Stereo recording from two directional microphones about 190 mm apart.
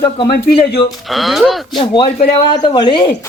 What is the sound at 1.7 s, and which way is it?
Speech, 25° left (ahead or behind).